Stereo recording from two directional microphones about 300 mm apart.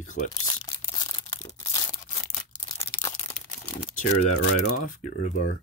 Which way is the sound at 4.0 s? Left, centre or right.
Left.